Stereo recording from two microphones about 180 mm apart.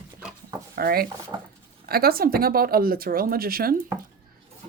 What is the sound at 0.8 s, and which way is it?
Speech, 55° right (ahead or behind).